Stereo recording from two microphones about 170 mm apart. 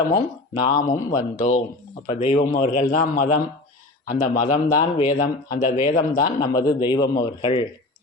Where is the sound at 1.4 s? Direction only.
50° left (ahead or behind).